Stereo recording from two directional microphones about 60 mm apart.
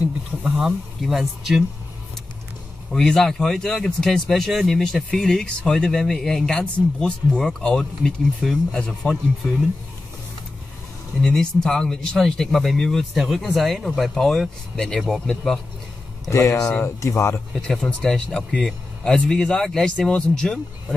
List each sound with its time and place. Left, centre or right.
0.6 s speech: centre
2.9 s speech: centre
6.5 s speech: centre
11.2 s speech: centre
13.1 s speech: centre
16.3 s speech: left
17.6 s speech: centre